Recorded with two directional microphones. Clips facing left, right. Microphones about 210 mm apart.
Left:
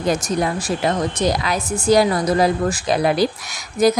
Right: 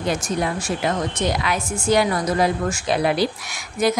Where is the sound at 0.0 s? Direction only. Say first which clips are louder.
Left 3 dB; 40° left (ahead or behind).